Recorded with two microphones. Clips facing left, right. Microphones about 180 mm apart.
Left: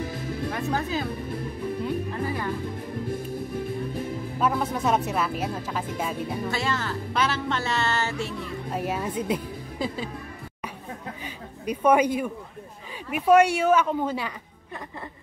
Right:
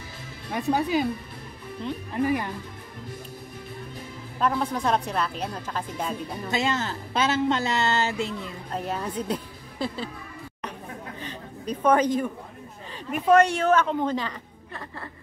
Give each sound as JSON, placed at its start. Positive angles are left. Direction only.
{"t": 0.5, "sound": "speech", "side_deg": -15}
{"t": 2.2, "sound": "speech", "side_deg": -15}
{"t": 4.4, "sound": "speech", "side_deg": 5}
{"t": 6.5, "sound": "speech", "side_deg": -20}
{"t": 8.7, "sound": "a woman's voice", "side_deg": 10}
{"t": 11.2, "sound": "a sound", "side_deg": 10}
{"t": 13.1, "sound": "speech", "side_deg": 10}